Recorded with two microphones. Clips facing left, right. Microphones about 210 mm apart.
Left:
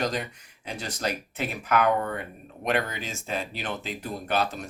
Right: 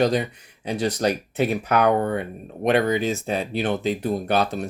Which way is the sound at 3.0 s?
35° right (ahead or behind).